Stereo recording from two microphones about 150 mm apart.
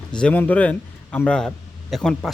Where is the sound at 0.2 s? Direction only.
10° left (ahead or behind).